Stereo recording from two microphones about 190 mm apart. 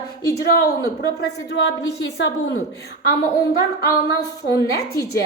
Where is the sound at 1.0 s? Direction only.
60° left (ahead or behind).